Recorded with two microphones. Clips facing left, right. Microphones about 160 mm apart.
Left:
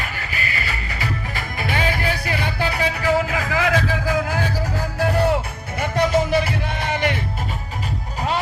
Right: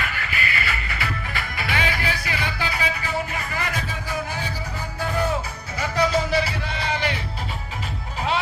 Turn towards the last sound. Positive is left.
turn(degrees=50)  # may be behind; listen again after turning